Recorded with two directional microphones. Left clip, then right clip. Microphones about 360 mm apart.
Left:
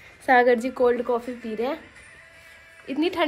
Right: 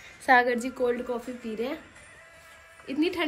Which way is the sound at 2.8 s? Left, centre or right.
Centre.